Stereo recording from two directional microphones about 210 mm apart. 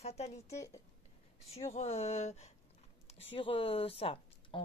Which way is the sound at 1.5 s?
30° left (ahead or behind).